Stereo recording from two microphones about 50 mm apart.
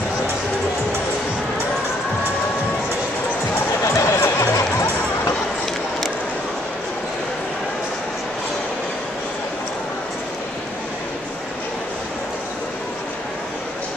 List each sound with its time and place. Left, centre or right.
3.9 s music: left